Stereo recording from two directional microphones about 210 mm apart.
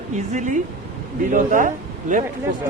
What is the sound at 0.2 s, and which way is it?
Speech, 35° right (ahead or behind).